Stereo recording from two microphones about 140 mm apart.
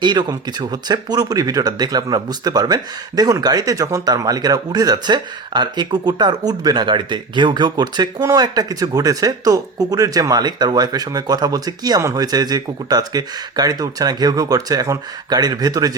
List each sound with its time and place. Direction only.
0.0 s speech: 30° right (ahead or behind)